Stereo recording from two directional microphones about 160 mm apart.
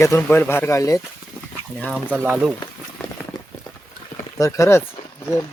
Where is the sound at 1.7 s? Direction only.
5° left (ahead or behind).